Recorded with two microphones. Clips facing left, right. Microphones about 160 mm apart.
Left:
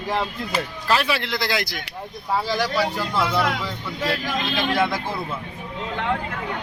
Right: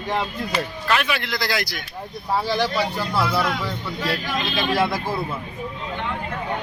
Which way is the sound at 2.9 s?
10° right (ahead or behind).